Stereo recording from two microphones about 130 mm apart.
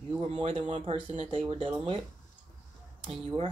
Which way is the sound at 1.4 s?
45° right (ahead or behind).